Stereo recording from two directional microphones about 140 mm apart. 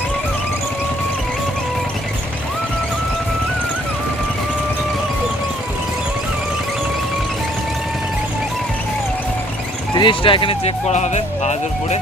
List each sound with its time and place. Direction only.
9.9 s speech: 35° left (ahead or behind); by 11.9 s 55° left (ahead or behind)